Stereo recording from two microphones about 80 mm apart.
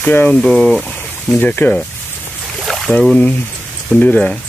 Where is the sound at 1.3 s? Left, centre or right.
Left.